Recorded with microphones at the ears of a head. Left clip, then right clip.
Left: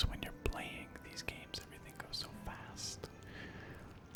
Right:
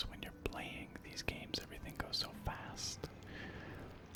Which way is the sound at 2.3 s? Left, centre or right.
Centre.